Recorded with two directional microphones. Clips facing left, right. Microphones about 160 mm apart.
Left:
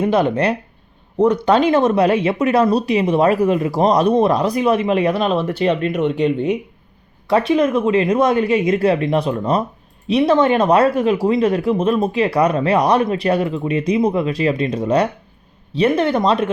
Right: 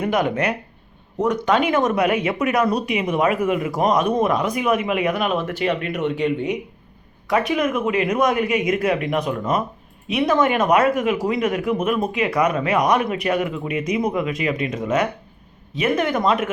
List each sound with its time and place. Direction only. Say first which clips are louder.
0.0 s speech: left 4 dB; 30° left (ahead or behind)